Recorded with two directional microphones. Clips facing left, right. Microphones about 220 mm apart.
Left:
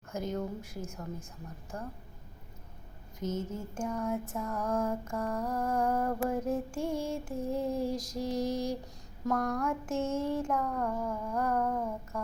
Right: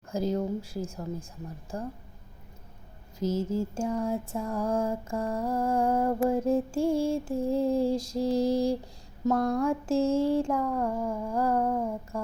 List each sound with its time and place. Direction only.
0.1 s speech: 30° right (ahead or behind)
1.7 s music: 30° right (ahead or behind)
3.2 s music: 30° right (ahead or behind)